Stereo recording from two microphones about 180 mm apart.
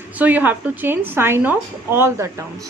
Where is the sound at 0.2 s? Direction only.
10° right (ahead or behind).